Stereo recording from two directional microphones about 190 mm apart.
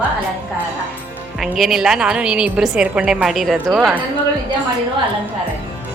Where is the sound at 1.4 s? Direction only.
Centre (ahead or behind).